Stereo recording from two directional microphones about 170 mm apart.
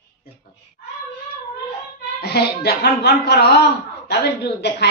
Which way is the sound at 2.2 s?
70° left (ahead or behind).